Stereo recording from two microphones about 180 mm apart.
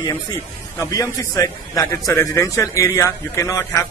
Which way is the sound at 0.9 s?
20° left (ahead or behind).